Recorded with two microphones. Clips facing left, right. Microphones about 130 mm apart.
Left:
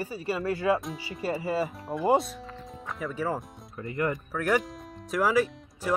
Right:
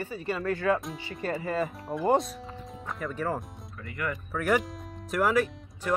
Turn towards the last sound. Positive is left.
turn(degrees=0)  # may be behind; listen again after turning